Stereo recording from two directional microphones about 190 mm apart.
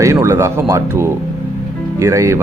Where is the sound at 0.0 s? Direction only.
15° right (ahead or behind).